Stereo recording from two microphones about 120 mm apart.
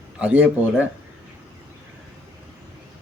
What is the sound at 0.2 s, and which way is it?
Speech, 15° right (ahead or behind).